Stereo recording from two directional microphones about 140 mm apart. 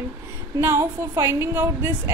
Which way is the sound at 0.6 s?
20° right (ahead or behind).